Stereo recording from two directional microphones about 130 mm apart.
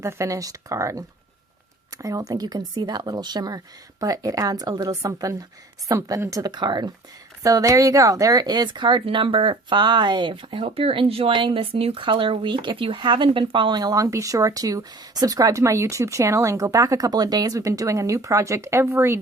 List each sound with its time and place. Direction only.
0.0 s a woman's voice: 25° right (ahead or behind)